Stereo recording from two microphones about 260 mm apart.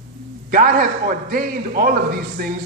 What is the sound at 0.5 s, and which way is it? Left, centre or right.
A man's voice, right.